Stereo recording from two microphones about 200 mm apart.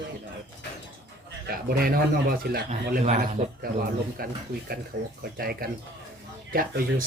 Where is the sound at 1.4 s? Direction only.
50° right (ahead or behind).